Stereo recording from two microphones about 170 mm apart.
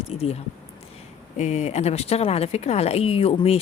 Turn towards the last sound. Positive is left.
turn(degrees=35)  # may be behind; listen again after turning